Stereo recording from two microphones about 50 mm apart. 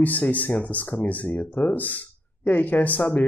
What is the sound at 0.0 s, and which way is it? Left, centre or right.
Speech, left.